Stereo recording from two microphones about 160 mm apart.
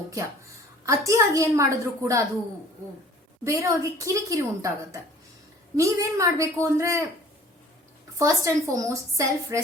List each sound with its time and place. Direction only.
0.9 s speech: 20° right (ahead or behind)
3.4 s speech: 20° right (ahead or behind)
8.2 s speech: 20° right (ahead or behind)